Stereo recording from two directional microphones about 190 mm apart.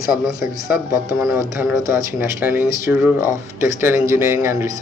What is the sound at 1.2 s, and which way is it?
Speech, 15° right (ahead or behind).